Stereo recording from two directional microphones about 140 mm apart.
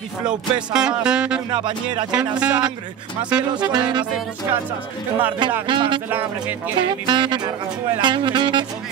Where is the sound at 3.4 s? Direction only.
30° right (ahead or behind).